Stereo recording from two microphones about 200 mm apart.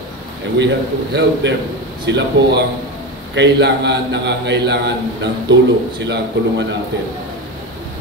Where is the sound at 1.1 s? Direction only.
55° right (ahead or behind).